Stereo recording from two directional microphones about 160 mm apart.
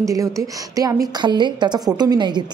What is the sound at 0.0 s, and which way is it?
A woman's voice, 20° right (ahead or behind).